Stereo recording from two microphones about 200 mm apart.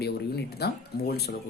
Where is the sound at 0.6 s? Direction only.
50° left (ahead or behind).